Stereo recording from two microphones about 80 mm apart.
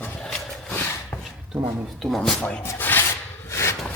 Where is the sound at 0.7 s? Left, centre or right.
Left.